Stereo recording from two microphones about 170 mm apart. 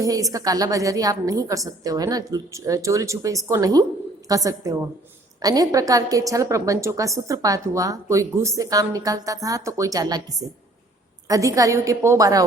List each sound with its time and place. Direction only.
0.0 s a woman's voice: 20° right (ahead or behind)